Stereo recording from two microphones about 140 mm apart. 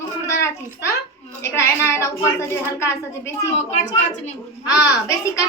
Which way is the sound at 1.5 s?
20° left (ahead or behind).